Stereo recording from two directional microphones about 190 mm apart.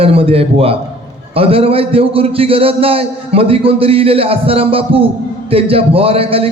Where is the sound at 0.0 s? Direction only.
30° right (ahead or behind).